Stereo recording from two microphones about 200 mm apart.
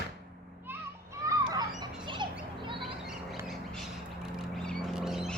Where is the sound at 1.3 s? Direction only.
20° right (ahead or behind).